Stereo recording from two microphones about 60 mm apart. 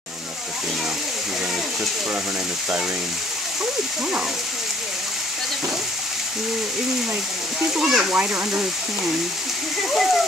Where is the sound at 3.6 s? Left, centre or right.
Centre.